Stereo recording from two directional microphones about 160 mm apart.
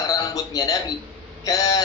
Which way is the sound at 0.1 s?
20° left (ahead or behind).